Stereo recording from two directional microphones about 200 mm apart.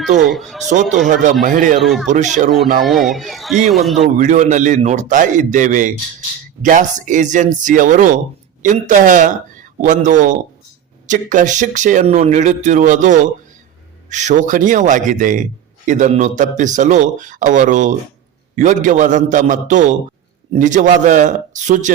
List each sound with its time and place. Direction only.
0.3 s a man's voice: centre (ahead or behind)
0.7 s speech: 35° right (ahead or behind)
1.8 s a man's voice: centre (ahead or behind)
2.0 s speech: 35° right (ahead or behind)
2.8 s a man's voice: centre (ahead or behind)
4.0 s speech: 35° right (ahead or behind)